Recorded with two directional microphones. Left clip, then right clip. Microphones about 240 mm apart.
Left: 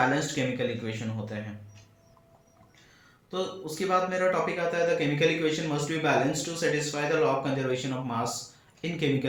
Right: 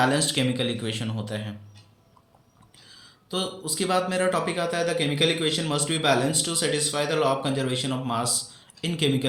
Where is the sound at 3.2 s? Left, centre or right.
Right.